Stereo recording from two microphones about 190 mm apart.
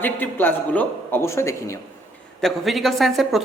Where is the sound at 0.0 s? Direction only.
10° left (ahead or behind).